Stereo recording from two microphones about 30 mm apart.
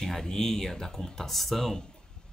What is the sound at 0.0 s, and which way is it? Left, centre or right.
Speech, centre.